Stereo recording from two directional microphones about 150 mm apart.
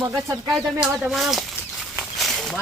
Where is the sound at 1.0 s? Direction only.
Centre (ahead or behind).